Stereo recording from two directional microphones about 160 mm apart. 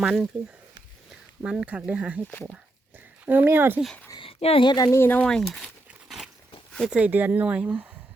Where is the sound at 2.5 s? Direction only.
10° right (ahead or behind).